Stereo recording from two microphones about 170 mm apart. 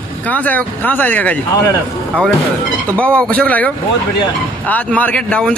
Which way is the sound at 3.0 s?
5° left (ahead or behind).